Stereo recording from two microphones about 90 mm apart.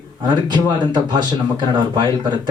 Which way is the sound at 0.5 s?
55° right (ahead or behind).